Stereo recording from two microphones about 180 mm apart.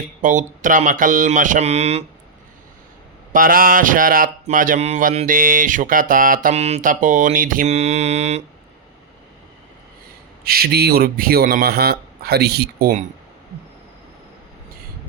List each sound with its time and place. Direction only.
0.2 s mantra: 45° right (ahead or behind)
3.3 s mantra: 50° right (ahead or behind)
10.4 s speech: 60° right (ahead or behind)